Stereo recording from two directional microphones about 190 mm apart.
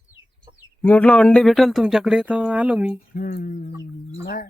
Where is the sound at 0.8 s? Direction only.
10° left (ahead or behind).